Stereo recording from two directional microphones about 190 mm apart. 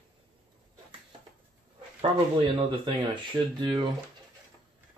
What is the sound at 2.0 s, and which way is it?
Speech, 30° right (ahead or behind).